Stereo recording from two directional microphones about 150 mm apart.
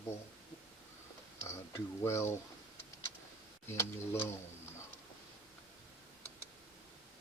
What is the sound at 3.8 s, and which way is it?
Speech, 15° left (ahead or behind).